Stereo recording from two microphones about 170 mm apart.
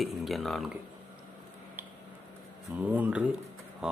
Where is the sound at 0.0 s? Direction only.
Centre (ahead or behind).